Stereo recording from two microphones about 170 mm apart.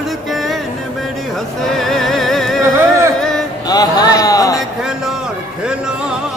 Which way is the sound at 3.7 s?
25° left (ahead or behind).